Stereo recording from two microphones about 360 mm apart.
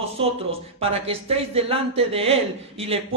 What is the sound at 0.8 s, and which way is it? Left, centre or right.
Speech, centre.